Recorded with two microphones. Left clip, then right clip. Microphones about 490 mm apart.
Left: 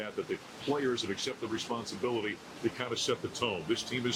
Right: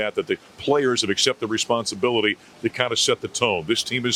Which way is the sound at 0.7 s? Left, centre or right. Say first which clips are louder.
Right 12 dB; right.